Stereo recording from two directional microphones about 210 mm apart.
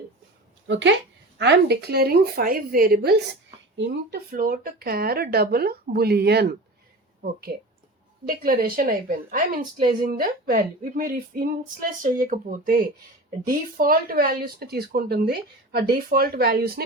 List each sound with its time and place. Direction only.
0.7 s speech: 60° right (ahead or behind)
8.3 s speech: 45° right (ahead or behind)